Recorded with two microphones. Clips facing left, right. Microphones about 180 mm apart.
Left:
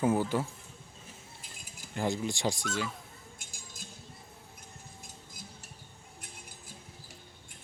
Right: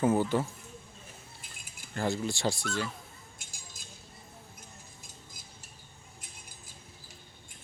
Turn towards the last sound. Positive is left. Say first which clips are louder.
# left 3 dB
turn(degrees=60)  # may be behind; listen again after turning